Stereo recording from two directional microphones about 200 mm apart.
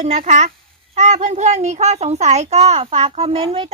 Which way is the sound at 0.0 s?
35° right (ahead or behind).